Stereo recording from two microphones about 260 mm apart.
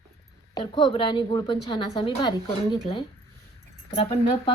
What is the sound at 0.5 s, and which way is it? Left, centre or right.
A woman's voice, centre.